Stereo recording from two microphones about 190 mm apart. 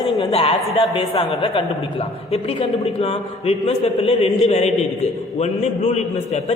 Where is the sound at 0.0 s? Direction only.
30° left (ahead or behind).